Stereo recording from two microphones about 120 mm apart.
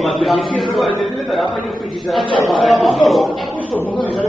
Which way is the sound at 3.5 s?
15° left (ahead or behind).